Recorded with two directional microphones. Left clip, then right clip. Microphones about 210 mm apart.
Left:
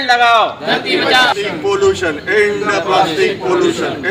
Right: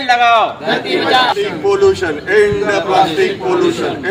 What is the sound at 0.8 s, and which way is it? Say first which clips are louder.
Speech: left 1 dB; 10° left (ahead or behind).